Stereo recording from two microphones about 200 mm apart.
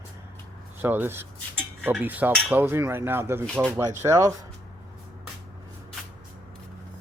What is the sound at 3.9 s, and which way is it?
Speech, 15° right (ahead or behind).